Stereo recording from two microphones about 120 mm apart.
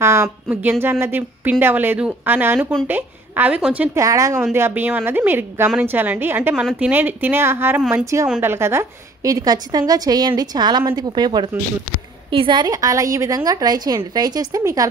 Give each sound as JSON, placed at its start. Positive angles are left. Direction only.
{"t": 0.0, "sound": "a woman's voice", "side_deg": -20}
{"t": 3.9, "sound": "a woman's voice", "side_deg": -25}